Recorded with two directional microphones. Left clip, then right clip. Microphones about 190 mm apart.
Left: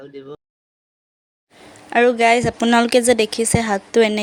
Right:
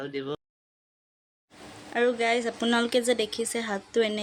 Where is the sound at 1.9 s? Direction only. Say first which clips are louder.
Left 11 dB; 45° left (ahead or behind).